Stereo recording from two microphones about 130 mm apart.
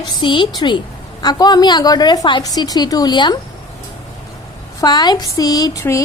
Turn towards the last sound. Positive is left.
turn(degrees=30)  # may be behind; listen again after turning